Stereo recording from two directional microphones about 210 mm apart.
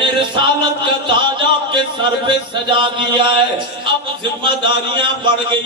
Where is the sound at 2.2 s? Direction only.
25° right (ahead or behind).